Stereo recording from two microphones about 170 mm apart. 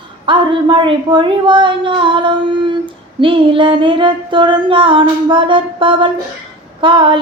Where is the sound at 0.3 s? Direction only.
30° right (ahead or behind).